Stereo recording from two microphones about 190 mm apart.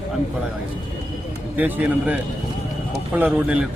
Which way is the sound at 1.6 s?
10° right (ahead or behind).